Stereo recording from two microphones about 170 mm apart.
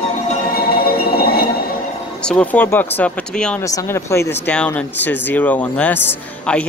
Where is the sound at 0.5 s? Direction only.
60° left (ahead or behind).